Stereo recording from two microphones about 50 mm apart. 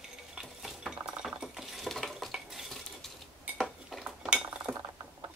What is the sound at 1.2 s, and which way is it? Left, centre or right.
Cutlery, centre.